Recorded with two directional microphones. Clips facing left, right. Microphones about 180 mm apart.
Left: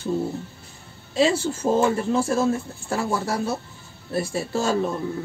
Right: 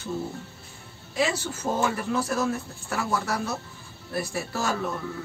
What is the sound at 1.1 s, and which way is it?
Speech, 30° left (ahead or behind).